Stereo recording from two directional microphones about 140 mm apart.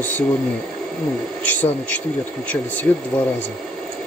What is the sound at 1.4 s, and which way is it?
Speech, 10° left (ahead or behind).